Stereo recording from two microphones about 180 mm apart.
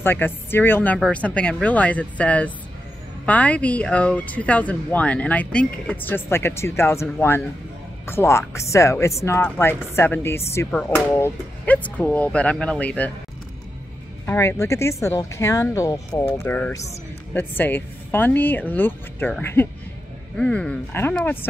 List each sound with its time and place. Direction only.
0.0 s speech: 10° left (ahead or behind)
14.2 s speech: 10° left (ahead or behind)